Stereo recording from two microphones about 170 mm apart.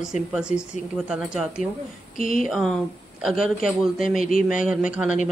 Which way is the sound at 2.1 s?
50° left (ahead or behind).